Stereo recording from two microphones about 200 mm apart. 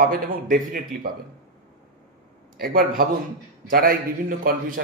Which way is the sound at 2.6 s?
45° right (ahead or behind).